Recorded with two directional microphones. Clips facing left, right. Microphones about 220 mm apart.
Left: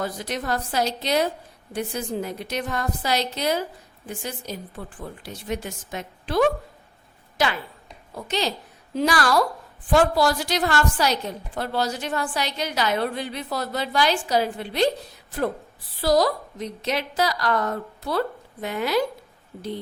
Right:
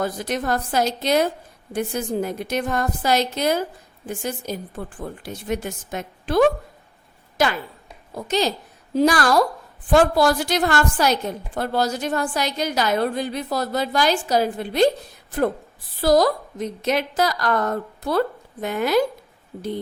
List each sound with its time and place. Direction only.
0.0 s a woman's voice: 50° right (ahead or behind)
8.1 s a woman's voice: 45° right (ahead or behind)
16.0 s a woman's voice: 50° right (ahead or behind)